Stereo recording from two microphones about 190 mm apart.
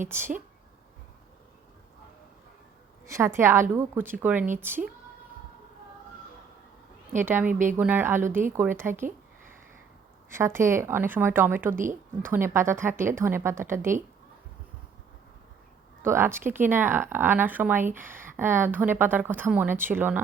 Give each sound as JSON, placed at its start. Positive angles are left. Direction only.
{"t": 0.0, "sound": "a woman's voice", "side_deg": -10}
{"t": 3.1, "sound": "a woman's voice", "side_deg": -15}
{"t": 7.2, "sound": "a woman's voice", "side_deg": -10}
{"t": 10.3, "sound": "a woman's voice", "side_deg": -15}
{"t": 11.8, "sound": "speech", "side_deg": -45}
{"t": 12.3, "sound": "a woman's voice", "side_deg": -15}
{"t": 16.0, "sound": "a woman's voice", "side_deg": -15}